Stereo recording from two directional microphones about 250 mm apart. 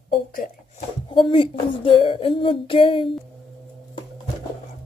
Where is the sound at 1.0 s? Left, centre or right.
Centre.